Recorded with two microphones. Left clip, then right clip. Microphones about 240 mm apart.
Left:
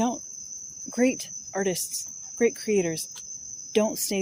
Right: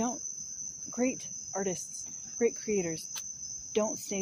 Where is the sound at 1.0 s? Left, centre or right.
Left.